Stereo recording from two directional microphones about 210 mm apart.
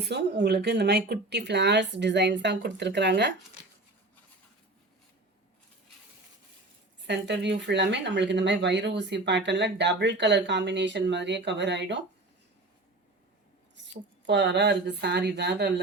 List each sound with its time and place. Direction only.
0.0 s speech: 50° right (ahead or behind)
7.0 s speech: 55° right (ahead or behind)
13.7 s a woman's voice: 60° right (ahead or behind)